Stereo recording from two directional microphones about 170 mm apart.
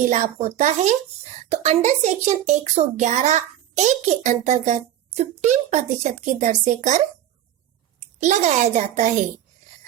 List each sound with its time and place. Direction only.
0.0 s a child's voice: 40° right (ahead or behind)
8.2 s a child's voice: 45° right (ahead or behind)